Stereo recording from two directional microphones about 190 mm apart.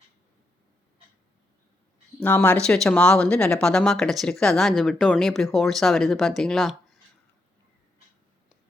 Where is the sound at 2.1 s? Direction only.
10° left (ahead or behind).